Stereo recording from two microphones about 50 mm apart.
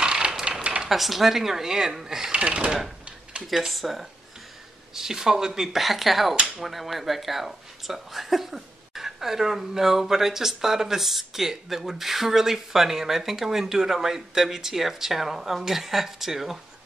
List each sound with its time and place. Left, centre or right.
0.0 s mechanisms: centre
0.8 s speech: centre
2.3 s speech: right
3.4 s speech: centre